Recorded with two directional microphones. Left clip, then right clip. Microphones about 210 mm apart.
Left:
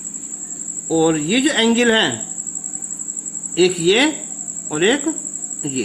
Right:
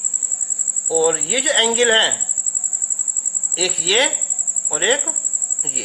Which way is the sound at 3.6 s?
10° left (ahead or behind).